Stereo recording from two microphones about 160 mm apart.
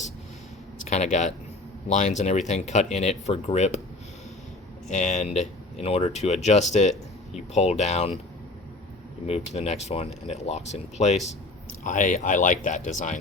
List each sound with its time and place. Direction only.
0.9 s speech: 45° left (ahead or behind)
4.9 s speech: 50° left (ahead or behind)
9.2 s speech: 40° left (ahead or behind)